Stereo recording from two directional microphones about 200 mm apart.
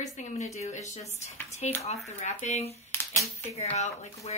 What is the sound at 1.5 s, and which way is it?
Speech, 35° left (ahead or behind).